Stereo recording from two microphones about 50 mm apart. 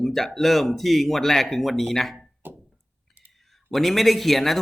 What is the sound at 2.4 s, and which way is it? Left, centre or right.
Music, right.